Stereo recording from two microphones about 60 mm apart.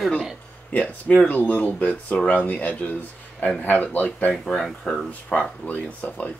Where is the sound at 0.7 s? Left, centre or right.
Left.